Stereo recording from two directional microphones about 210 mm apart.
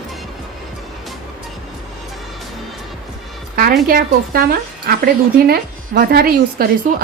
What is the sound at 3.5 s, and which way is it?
A woman's voice, 45° right (ahead or behind).